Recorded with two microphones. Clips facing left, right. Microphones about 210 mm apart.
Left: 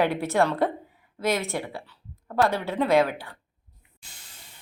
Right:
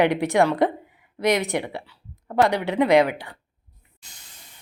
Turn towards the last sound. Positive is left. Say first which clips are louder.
# right 4 dB
turn(degrees=-15)  # may be behind; listen again after turning